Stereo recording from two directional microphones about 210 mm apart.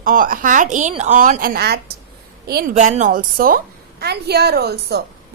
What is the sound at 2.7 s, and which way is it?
A woman's voice, 35° right (ahead or behind).